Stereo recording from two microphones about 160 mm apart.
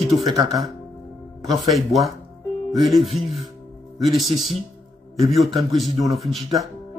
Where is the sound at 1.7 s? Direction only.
Centre (ahead or behind).